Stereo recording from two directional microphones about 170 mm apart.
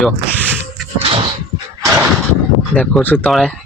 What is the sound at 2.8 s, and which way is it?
Speech, 10° left (ahead or behind).